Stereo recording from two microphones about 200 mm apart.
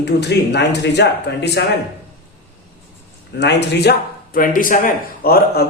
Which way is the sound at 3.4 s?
55° left (ahead or behind).